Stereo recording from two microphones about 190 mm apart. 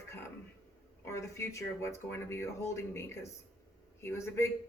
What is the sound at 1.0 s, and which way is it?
Speech, 15° left (ahead or behind).